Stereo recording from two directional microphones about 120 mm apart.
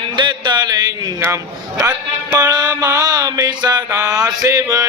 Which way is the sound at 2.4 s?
35° right (ahead or behind).